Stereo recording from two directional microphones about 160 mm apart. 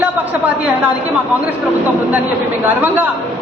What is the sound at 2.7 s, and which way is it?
Speech, 10° right (ahead or behind).